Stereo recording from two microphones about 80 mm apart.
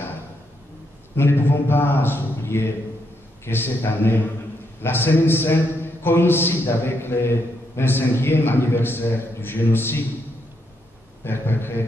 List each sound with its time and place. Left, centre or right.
1.1 s a man's voice: left
11.2 s a man's voice: left